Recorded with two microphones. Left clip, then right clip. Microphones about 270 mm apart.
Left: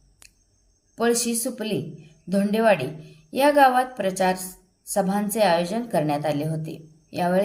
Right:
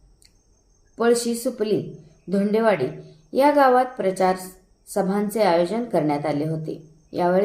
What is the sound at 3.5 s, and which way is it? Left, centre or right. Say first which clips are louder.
Speech: left 1 dB; left.